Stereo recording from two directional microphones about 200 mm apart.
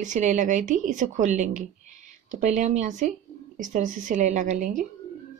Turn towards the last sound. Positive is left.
turn(degrees=-40)  # may be behind; listen again after turning